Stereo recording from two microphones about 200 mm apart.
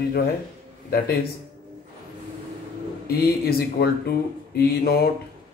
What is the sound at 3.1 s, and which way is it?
Speech, 50° left (ahead or behind).